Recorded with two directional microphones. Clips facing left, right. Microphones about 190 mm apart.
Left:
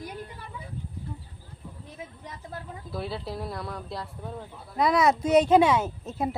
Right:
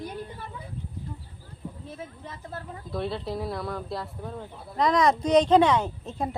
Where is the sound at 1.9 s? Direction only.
15° left (ahead or behind).